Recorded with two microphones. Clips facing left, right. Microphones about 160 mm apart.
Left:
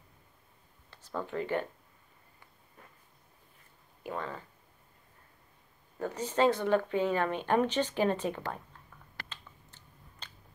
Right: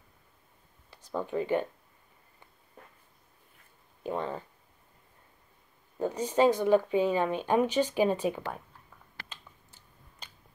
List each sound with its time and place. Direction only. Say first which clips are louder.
0.8 s speech: right 3 dB; 15° right (ahead or behind)
4.0 s speech: right 5 dB; 25° right (ahead or behind)
5.9 s speech: right 3 dB; 15° right (ahead or behind)
9.3 s a sound: even; 10° right (ahead or behind)